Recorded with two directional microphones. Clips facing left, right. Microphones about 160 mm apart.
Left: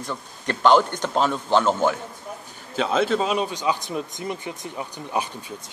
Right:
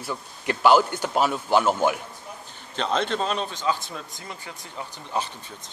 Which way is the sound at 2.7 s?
5° left (ahead or behind).